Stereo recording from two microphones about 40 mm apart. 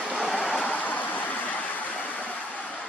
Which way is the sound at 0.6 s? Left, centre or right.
Left.